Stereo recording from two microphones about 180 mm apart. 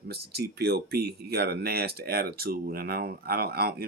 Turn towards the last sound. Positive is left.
turn(degrees=-60)  # may be behind; listen again after turning